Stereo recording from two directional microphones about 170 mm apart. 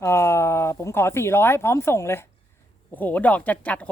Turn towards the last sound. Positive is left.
turn(degrees=10)  # may be behind; listen again after turning